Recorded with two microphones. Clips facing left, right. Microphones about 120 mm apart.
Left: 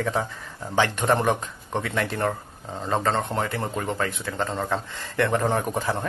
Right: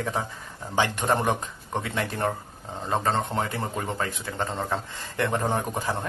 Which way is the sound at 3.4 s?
25° right (ahead or behind).